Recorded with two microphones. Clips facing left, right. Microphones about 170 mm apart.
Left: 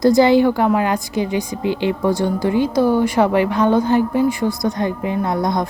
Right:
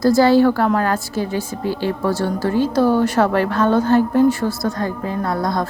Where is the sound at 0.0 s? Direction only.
20° left (ahead or behind).